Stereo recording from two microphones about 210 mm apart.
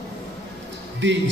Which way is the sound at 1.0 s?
60° right (ahead or behind).